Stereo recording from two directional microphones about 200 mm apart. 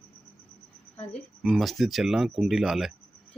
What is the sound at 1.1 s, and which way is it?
Speech, centre (ahead or behind).